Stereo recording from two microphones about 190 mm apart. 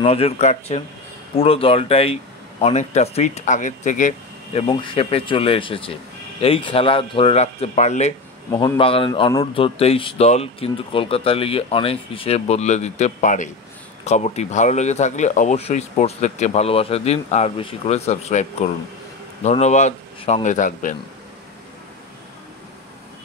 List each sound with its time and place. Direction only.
0.0 s speech: 30° left (ahead or behind)
4.6 s a man's voice: 30° left (ahead or behind)
8.5 s a man's voice: 20° left (ahead or behind); by 20.9 s 40° left (ahead or behind)